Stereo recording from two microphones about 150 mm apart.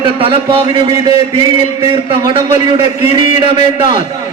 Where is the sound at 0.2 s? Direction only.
35° right (ahead or behind).